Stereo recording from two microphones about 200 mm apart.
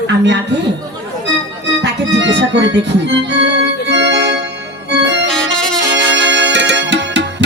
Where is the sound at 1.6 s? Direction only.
65° right (ahead or behind).